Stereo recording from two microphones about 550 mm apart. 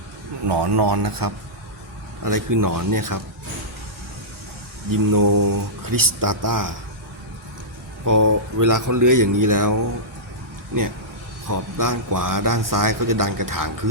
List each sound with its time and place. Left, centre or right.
0.4 s a man's voice: right
4.9 s a man's voice: right
8.0 s a man's voice: right
11.4 s a man's voice: right